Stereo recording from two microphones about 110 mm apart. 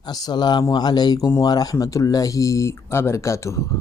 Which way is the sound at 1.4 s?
35° left (ahead or behind).